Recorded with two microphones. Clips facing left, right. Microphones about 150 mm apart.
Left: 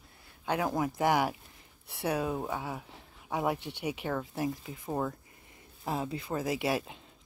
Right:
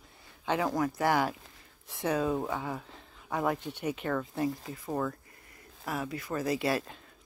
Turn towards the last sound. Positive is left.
turn(degrees=15)  # may be behind; listen again after turning